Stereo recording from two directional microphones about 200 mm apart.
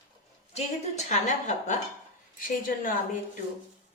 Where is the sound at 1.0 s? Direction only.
35° left (ahead or behind).